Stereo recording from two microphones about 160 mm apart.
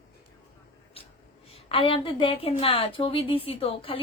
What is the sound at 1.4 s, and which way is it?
A woman's voice, 35° left (ahead or behind).